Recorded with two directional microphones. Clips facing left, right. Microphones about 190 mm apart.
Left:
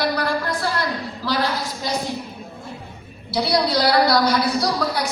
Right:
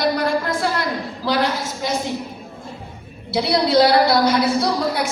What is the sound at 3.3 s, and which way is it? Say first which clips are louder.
A woman's voice: right 4 dB; 25° right (ahead or behind).